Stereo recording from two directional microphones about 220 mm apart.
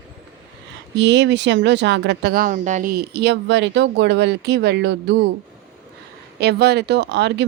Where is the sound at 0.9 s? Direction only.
50° right (ahead or behind).